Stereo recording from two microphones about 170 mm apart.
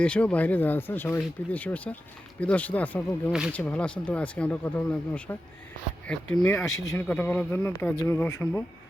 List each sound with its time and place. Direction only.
0.0 s speech: 5° left (ahead or behind)
6.7 s speech: 20° left (ahead or behind)
7.1 s speech: 10° left (ahead or behind)